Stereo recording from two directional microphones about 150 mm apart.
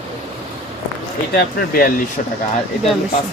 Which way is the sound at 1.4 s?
85° left.